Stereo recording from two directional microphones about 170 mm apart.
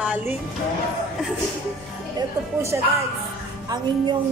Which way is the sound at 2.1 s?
15° right (ahead or behind).